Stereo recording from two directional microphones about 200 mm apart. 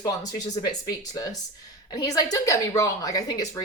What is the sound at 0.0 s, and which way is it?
A woman's voice, 20° left (ahead or behind).